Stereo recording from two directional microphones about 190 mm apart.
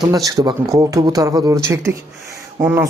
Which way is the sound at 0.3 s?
20° right (ahead or behind).